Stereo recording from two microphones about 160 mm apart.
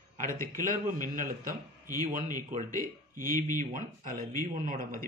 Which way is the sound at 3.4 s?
55° right (ahead or behind).